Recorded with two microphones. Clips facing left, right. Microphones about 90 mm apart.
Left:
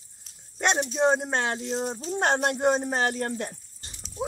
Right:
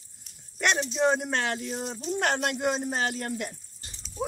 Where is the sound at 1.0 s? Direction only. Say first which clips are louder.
Left 2 dB; 25° left (ahead or behind).